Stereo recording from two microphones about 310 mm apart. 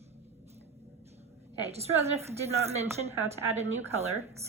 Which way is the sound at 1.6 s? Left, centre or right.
Centre.